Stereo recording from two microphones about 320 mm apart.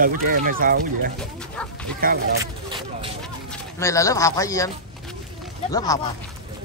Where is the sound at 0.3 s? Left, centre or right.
Right.